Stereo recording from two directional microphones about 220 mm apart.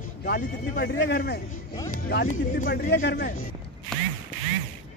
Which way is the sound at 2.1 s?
40° left (ahead or behind).